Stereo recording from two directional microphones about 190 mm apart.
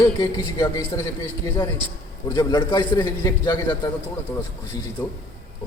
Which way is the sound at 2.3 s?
20° left (ahead or behind).